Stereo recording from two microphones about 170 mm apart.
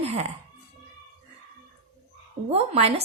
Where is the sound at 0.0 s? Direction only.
35° right (ahead or behind).